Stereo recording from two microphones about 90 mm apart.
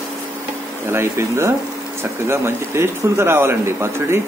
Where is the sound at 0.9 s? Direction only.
30° right (ahead or behind).